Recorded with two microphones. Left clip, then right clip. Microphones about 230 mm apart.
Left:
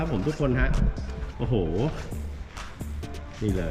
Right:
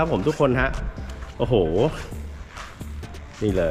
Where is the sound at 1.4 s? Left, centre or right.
Centre.